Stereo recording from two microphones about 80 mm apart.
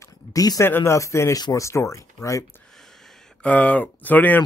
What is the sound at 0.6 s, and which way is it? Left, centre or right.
Speech, left.